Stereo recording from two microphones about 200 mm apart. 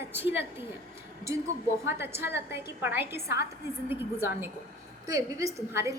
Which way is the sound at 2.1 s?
10° right (ahead or behind).